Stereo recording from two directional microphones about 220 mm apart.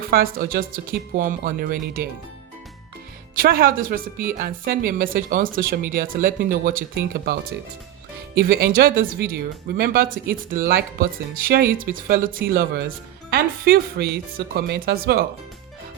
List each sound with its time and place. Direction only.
0.0 s speech: 40° right (ahead or behind)
3.3 s speech: 40° right (ahead or behind)
8.4 s speech: 40° right (ahead or behind)